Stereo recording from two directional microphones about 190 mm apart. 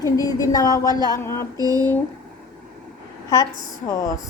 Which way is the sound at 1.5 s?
20° right (ahead or behind).